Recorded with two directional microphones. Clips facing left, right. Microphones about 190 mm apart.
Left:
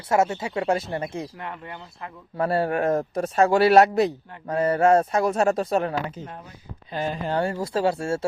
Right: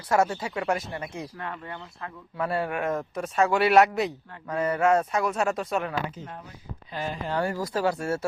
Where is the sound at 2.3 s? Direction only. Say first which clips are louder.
Left 5 dB; 35° left (ahead or behind).